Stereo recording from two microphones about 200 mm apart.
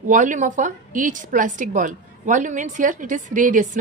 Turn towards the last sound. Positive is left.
turn(degrees=-40)  # may be behind; listen again after turning